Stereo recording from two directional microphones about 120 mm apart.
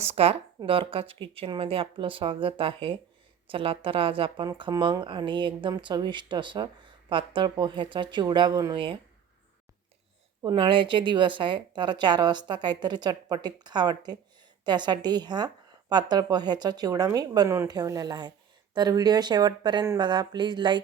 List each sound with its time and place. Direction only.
0.0 s a woman's voice: 55° right (ahead or behind); by 8.7 s 35° right (ahead or behind)
8.7 s a woman's voice: 45° right (ahead or behind)
10.4 s speech: 45° right (ahead or behind)